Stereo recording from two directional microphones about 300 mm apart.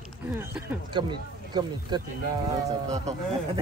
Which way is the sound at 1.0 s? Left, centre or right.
Centre.